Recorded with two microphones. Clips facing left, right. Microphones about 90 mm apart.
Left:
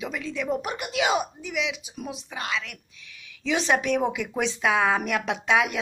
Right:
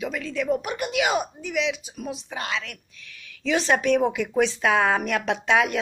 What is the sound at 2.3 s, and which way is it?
Speech, 5° left (ahead or behind).